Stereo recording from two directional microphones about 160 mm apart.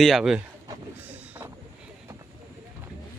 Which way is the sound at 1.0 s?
10° right (ahead or behind).